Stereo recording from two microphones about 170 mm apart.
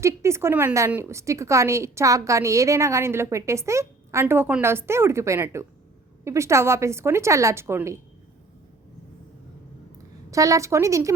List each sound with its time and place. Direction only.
0.0 s a woman's voice: 15° right (ahead or behind)
10.3 s a woman's voice: 20° right (ahead or behind)